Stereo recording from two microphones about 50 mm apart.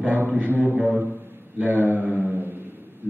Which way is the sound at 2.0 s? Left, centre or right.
Right.